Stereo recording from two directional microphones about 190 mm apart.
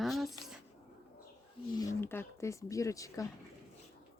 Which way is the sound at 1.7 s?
15° left (ahead or behind).